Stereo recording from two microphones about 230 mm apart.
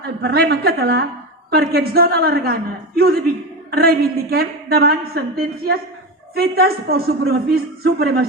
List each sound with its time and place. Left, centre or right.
0.2 s a man's voice: right
6.3 s a man's voice: right